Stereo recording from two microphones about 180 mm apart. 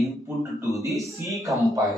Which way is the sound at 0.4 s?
15° right (ahead or behind).